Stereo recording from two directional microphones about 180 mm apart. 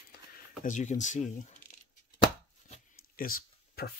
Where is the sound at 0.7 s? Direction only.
45° left (ahead or behind).